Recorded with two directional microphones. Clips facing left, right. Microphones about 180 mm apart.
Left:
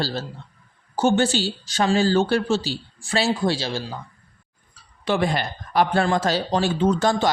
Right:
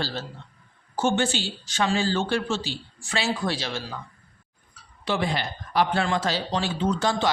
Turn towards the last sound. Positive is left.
turn(degrees=45)  # may be behind; listen again after turning